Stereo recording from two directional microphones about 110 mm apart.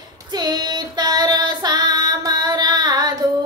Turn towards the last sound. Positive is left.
turn(degrees=-40)  # may be behind; listen again after turning